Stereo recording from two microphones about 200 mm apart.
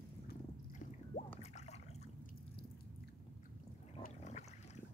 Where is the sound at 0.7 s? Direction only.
40° left (ahead or behind).